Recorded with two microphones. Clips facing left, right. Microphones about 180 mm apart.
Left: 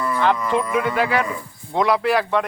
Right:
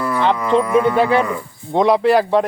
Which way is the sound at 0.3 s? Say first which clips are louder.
Right 6 dB; 70° right (ahead or behind).